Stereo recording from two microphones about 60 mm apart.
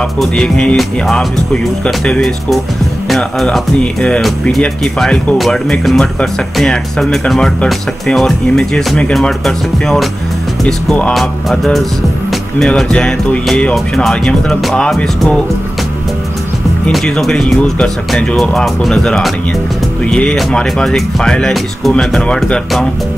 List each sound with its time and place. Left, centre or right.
0.2 s speech: centre
2.0 s speech: centre
3.8 s speech: centre
11.1 s speech: centre
15.0 s speech: centre
16.9 s speech: centre
20.1 s speech: centre